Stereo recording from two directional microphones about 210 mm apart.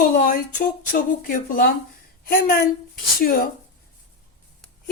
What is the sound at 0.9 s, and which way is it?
Music, 40° left (ahead or behind).